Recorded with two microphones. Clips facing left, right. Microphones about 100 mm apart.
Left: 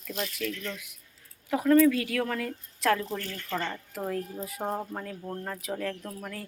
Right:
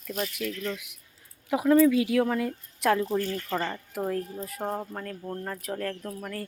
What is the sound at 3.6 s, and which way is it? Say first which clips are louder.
Speech: right 3 dB; 10° right (ahead or behind).